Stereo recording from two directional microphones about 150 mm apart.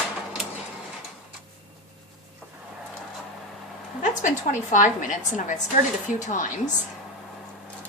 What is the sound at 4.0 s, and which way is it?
A woman's voice, 55° left (ahead or behind).